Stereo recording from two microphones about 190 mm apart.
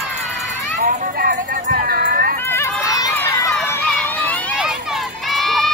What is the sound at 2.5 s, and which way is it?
Run, 15° left (ahead or behind).